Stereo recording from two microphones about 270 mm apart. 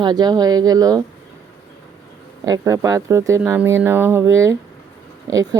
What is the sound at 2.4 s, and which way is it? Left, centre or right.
Speech, centre.